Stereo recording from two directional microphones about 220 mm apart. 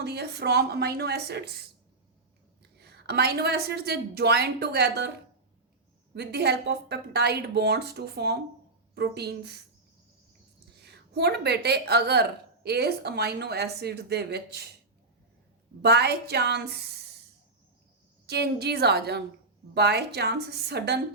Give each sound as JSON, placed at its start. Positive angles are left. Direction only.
{"t": 0.0, "sound": "a woman's voice", "side_deg": -50}
{"t": 2.7, "sound": "a woman's voice", "side_deg": -50}
{"t": 6.1, "sound": "a woman's voice", "side_deg": -50}
{"t": 10.8, "sound": "a woman's voice", "side_deg": -50}
{"t": 15.8, "sound": "a woman's voice", "side_deg": -50}
{"t": 18.3, "sound": "a woman's voice", "side_deg": -45}